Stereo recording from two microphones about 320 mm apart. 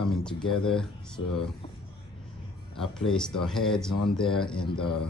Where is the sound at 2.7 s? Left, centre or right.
Centre.